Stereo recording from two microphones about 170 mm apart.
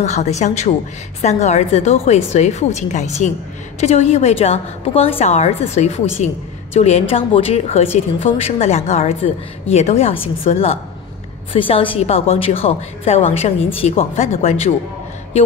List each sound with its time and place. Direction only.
0.0 s a woman's voice: 40° left (ahead or behind)